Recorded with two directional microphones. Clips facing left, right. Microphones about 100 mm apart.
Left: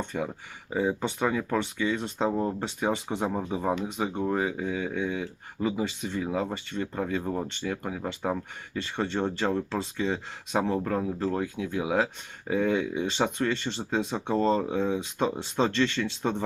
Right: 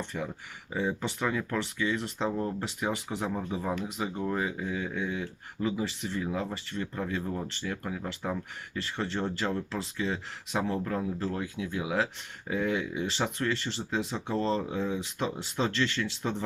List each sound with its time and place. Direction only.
0.0 s speech: 20° left (ahead or behind)